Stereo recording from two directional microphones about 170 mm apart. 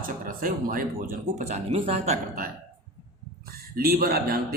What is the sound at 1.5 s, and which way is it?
Speech, 40° right (ahead or behind).